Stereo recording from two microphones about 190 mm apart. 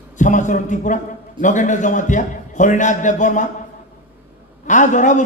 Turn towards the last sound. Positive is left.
turn(degrees=40)  # may be behind; listen again after turning